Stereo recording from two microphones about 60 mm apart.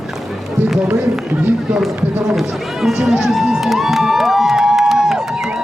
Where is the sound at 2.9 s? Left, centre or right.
Centre.